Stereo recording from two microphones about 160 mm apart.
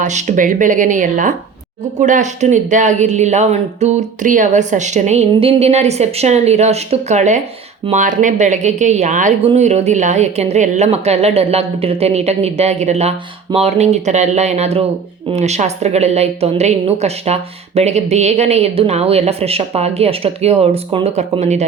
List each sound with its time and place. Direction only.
0.0 s a woman's voice: 45° right (ahead or behind)